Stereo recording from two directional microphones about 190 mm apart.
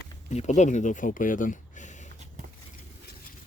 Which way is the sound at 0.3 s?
35° left (ahead or behind).